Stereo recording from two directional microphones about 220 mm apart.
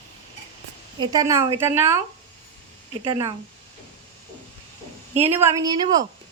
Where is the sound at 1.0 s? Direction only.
15° right (ahead or behind).